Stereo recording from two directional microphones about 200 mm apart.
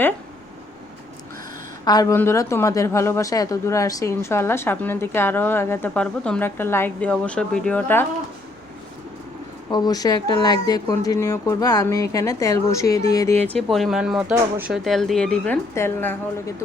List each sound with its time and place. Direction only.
1.8 s a woman's voice: 20° left (ahead or behind)
9.6 s a woman's voice: 20° left (ahead or behind)
13.5 s speech: centre (ahead or behind)